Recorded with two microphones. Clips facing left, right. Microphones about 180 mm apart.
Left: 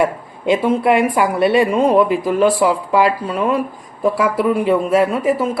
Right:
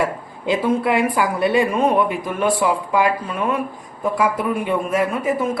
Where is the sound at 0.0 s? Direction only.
20° left (ahead or behind).